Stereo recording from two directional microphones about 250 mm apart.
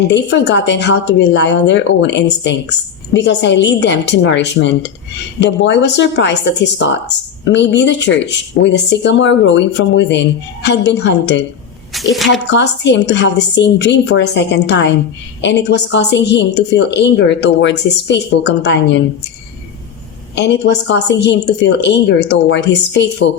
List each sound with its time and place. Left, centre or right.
0.1 s a woman's voice: left
11.9 s a woman's voice: centre
12.5 s a woman's voice: left
20.3 s a woman's voice: left